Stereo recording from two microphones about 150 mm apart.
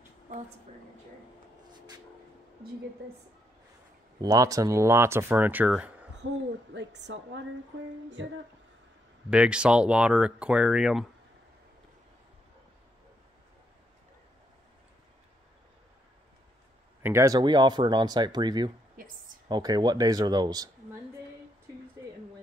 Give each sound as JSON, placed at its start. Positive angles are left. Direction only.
{"t": 4.2, "sound": "speech", "side_deg": -25}
{"t": 9.3, "sound": "speech", "side_deg": -5}
{"t": 17.0, "sound": "speech", "side_deg": -20}
{"t": 19.0, "sound": "a sound", "side_deg": -65}
{"t": 19.4, "sound": "speech", "side_deg": -25}